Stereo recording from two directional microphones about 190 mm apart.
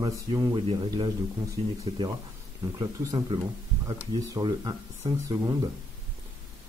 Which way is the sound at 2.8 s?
25° right (ahead or behind).